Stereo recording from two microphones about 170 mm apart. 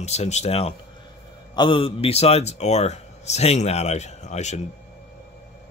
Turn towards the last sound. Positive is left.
turn(degrees=40)  # may be behind; listen again after turning